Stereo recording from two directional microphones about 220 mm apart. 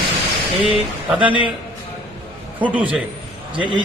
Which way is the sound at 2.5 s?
5° right (ahead or behind).